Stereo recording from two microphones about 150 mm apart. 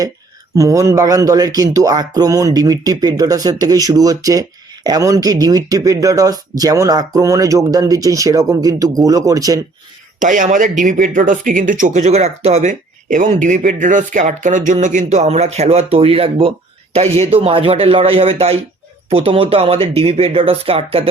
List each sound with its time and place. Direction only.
0.5 s speech: 20° right (ahead or behind)
10.2 s speech: 60° right (ahead or behind); by 21.1 s 40° right (ahead or behind)